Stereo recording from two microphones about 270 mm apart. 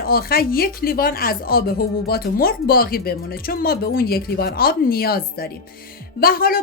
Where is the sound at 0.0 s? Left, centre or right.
Left.